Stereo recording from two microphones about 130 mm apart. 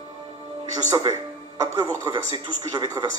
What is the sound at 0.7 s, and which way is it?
A man's voice, 30° right (ahead or behind).